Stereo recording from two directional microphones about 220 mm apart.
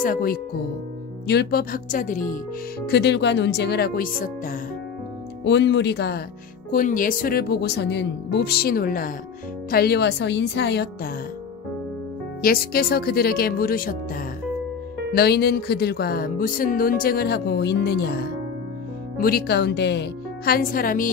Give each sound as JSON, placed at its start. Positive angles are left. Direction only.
{"t": 0.0, "sound": "speech", "side_deg": 40}
{"t": 2.9, "sound": "speech", "side_deg": 50}
{"t": 5.4, "sound": "speech", "side_deg": 55}
{"t": 6.7, "sound": "speech", "side_deg": 40}
{"t": 12.4, "sound": "speech", "side_deg": 45}